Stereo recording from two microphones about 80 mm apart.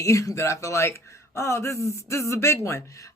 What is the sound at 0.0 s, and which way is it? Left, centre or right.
Speech, left.